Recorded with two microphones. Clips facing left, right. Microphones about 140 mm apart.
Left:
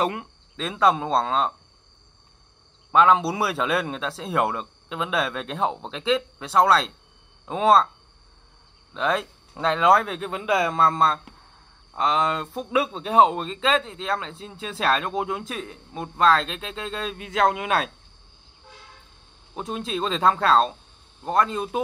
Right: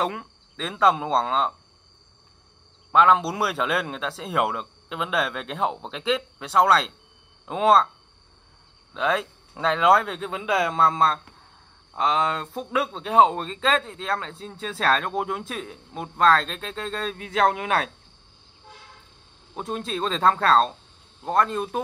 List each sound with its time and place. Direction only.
0.0 s speech: 5° left (ahead or behind)
2.9 s speech: centre (ahead or behind)
8.9 s speech: centre (ahead or behind)
19.5 s speech: centre (ahead or behind)